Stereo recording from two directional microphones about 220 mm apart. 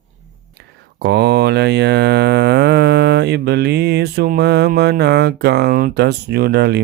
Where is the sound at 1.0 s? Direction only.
50° right (ahead or behind).